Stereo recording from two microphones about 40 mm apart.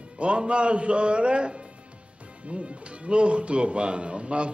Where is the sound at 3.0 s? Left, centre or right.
Right.